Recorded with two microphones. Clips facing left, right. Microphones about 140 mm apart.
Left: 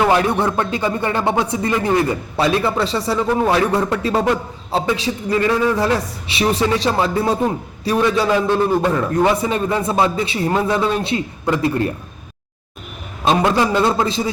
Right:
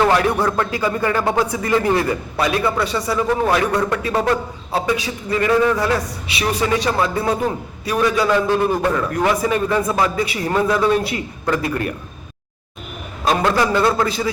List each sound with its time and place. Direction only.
0.0 s a man's voice: 20° left (ahead or behind)
13.2 s a man's voice: 20° left (ahead or behind)